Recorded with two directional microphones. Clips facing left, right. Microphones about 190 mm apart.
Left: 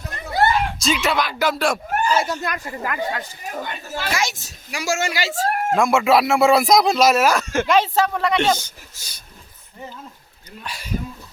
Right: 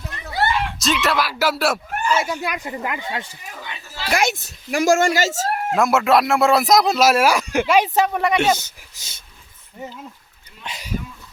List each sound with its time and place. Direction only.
0.1 s a sound: 45° left (ahead or behind)
0.8 s speech: centre (ahead or behind)
1.9 s a sound: 40° left (ahead or behind)
2.2 s speech: 10° right (ahead or behind)
3.4 s speech: 45° left (ahead or behind)
4.1 s speech: 60° right (ahead or behind)
5.7 s speech: centre (ahead or behind)
9.0 s speech: 25° right (ahead or behind)
10.6 s speech: 20° right (ahead or behind)